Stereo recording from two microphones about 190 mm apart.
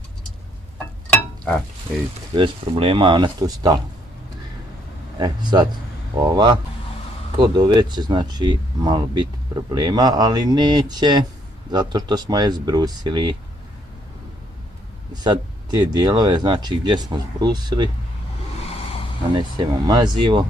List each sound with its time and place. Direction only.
2.3 s speech: 30° right (ahead or behind)
5.1 s speech: 25° right (ahead or behind)
15.2 s speech: 20° right (ahead or behind)
19.3 s speech: 20° right (ahead or behind)